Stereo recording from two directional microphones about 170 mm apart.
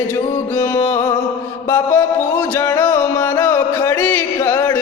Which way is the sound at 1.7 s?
15° left (ahead or behind).